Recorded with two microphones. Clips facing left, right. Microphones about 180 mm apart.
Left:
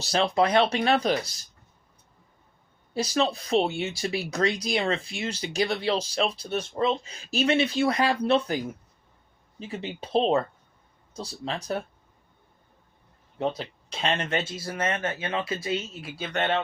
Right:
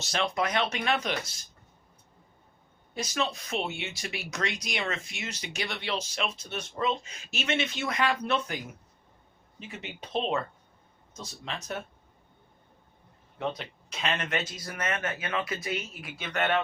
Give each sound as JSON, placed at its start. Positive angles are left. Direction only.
{"t": 0.0, "sound": "speech", "side_deg": 35}
{"t": 2.9, "sound": "speech", "side_deg": 35}
{"t": 13.6, "sound": "speech", "side_deg": 30}